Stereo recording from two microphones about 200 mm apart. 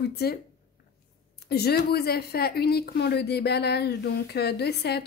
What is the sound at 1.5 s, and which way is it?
A woman's voice, 55° left (ahead or behind).